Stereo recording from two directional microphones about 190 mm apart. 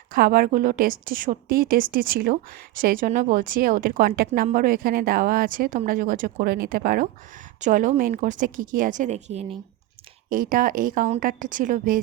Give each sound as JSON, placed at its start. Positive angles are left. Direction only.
{"t": 0.1, "sound": "a woman's voice", "side_deg": -50}
{"t": 10.2, "sound": "a woman's voice", "side_deg": -45}